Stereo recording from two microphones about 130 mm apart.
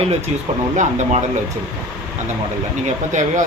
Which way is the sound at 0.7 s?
70° right (ahead or behind).